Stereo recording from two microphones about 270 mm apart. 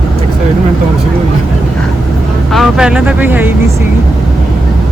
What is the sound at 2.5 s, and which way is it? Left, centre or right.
Speech, centre.